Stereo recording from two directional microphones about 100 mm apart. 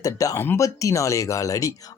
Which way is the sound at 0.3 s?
25° left (ahead or behind).